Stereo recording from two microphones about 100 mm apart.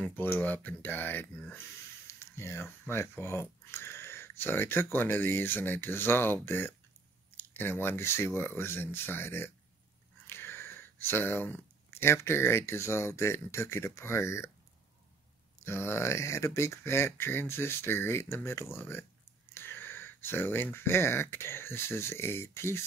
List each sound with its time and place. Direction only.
0.0 s speech: 15° left (ahead or behind)
15.6 s speech: 25° left (ahead or behind)